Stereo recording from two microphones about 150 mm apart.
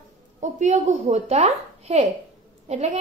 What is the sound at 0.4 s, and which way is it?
A woman's voice, 50° right (ahead or behind).